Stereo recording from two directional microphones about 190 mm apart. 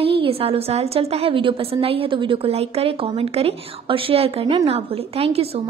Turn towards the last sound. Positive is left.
turn(degrees=-30)  # may be behind; listen again after turning